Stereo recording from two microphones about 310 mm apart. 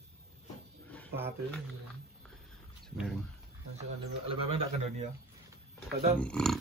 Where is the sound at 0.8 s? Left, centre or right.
Centre.